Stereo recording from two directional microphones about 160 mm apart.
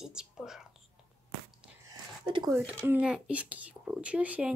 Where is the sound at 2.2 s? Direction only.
30° right (ahead or behind).